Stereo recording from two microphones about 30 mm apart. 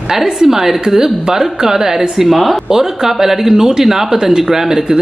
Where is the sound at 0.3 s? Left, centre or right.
Centre.